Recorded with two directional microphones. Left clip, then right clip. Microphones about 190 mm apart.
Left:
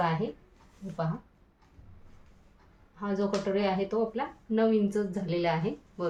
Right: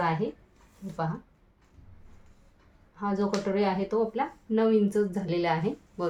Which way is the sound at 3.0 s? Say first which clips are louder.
Right 1 dB; 25° right (ahead or behind).